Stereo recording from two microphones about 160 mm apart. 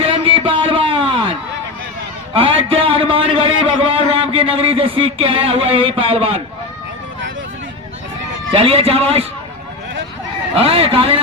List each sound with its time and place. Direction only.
0.0 s a sound: 35° right (ahead or behind)
2.3 s a man's voice: 35° right (ahead or behind)
8.5 s a man's voice: 40° right (ahead or behind)
10.5 s a man's voice: 35° right (ahead or behind)